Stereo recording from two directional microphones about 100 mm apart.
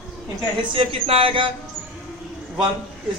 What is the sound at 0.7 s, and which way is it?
Speech, 65° right (ahead or behind).